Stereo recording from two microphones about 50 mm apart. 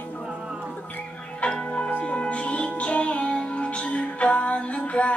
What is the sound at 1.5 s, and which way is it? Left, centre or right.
Music, left.